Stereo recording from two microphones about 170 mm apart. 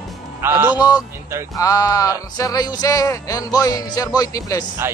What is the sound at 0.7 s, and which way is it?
Speech, 25° left (ahead or behind).